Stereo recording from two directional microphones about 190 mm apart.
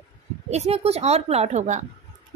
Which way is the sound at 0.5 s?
35° right (ahead or behind).